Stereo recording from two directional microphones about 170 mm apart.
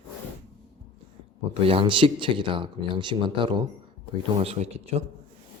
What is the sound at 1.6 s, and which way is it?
Speech, 30° right (ahead or behind).